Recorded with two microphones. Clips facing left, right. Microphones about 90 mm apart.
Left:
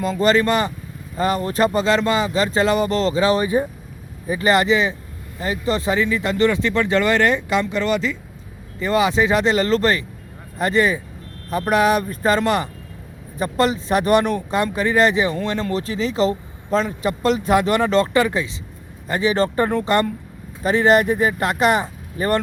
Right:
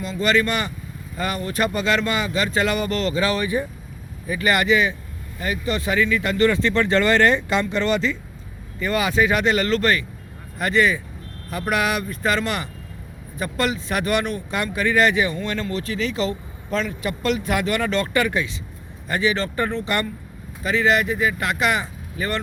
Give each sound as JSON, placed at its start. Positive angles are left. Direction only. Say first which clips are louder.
{"t": 0.0, "sound": "speech", "louder": "left 4 dB", "side_deg": 40}
{"t": 8.8, "sound": "speech", "louder": "left 3 dB", "side_deg": 25}